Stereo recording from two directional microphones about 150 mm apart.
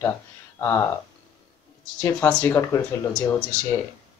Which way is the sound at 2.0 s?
10° left (ahead or behind).